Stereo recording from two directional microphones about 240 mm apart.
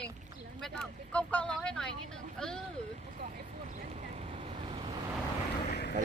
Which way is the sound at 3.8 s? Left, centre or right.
Right.